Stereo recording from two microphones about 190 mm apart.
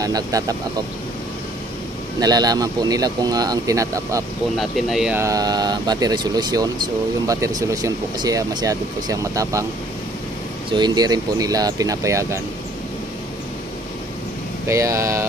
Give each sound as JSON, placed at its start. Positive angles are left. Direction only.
{"t": 0.0, "sound": "speech", "side_deg": -20}
{"t": 2.1, "sound": "speech", "side_deg": -20}
{"t": 4.6, "sound": "speech", "side_deg": 0}
{"t": 5.2, "sound": "speech", "side_deg": -20}
{"t": 10.7, "sound": "speech", "side_deg": -20}
{"t": 14.7, "sound": "speech", "side_deg": -15}